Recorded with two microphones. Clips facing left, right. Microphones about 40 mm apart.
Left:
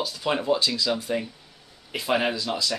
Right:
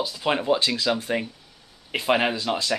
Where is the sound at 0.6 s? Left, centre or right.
Right.